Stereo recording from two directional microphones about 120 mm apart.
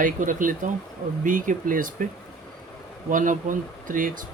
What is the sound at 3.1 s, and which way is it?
Speech, 90° right.